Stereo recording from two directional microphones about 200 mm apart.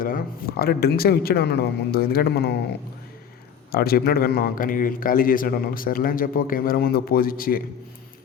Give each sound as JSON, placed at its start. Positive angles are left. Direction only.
{"t": 0.0, "sound": "speech", "side_deg": 50}
{"t": 3.7, "sound": "speech", "side_deg": 50}